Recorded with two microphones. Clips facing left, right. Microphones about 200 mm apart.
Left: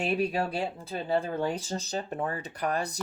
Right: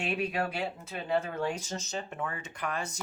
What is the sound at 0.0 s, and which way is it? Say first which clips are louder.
Speech: left 4 dB; 35° left (ahead or behind).